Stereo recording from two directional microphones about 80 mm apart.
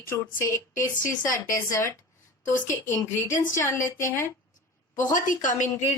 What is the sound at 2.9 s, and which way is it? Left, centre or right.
A woman's voice, left.